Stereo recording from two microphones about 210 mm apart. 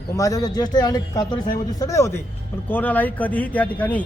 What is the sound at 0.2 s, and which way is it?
A man's voice, 15° left (ahead or behind).